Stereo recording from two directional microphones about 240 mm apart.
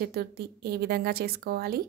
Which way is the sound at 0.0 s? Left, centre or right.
Right.